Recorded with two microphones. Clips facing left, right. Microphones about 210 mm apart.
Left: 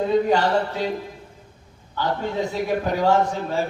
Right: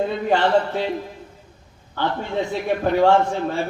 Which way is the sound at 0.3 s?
40° left (ahead or behind).